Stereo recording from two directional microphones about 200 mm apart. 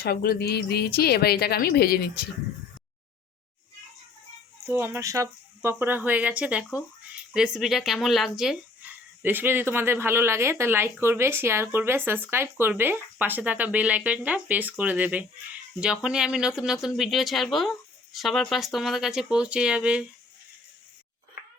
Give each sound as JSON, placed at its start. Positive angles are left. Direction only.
{"t": 0.0, "sound": "a woman's voice", "side_deg": 50}
{"t": 4.6, "sound": "speech", "side_deg": -10}